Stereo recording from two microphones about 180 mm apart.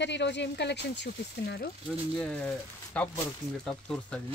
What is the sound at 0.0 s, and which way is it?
Speech, 75° left (ahead or behind).